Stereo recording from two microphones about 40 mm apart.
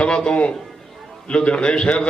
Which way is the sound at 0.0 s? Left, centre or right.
Left.